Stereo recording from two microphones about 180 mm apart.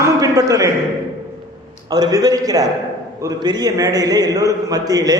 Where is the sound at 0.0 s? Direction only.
20° right (ahead or behind).